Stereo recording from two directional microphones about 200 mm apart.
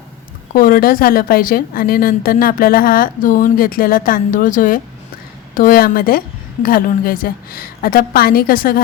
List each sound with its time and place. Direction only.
0.5 s a woman's voice: 45° left (ahead or behind)